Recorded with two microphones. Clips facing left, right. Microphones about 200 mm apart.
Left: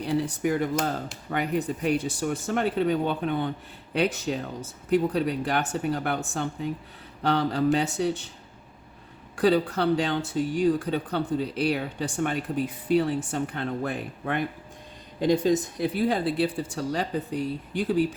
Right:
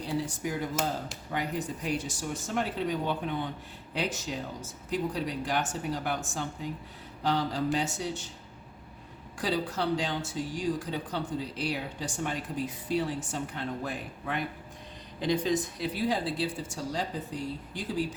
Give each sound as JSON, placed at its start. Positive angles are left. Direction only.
{"t": 0.0, "sound": "speech", "side_deg": 65}
{"t": 9.3, "sound": "speech", "side_deg": 60}